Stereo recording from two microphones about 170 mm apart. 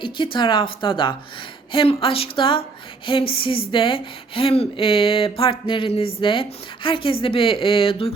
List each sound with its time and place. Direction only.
0.0 s speech: 30° left (ahead or behind)